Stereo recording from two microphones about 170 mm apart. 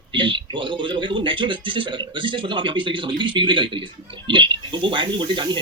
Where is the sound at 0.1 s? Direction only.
30° right (ahead or behind).